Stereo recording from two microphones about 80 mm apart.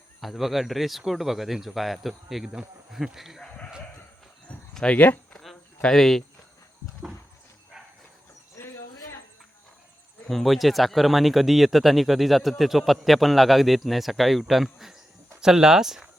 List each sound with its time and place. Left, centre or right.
0.2 s speech: centre
4.7 s speech: centre
5.3 s a sound: centre
5.8 s speech: centre
8.5 s bird: left
10.2 s speech: centre